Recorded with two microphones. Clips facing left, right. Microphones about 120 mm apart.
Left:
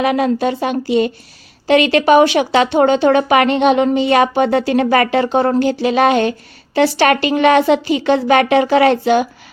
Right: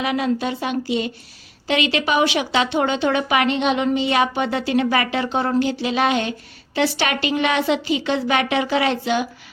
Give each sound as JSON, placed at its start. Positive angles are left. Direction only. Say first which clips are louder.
{"t": 0.0, "sound": "speech", "louder": "left 6 dB", "side_deg": 50}